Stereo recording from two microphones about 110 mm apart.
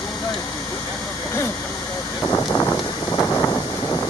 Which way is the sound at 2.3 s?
15° left (ahead or behind).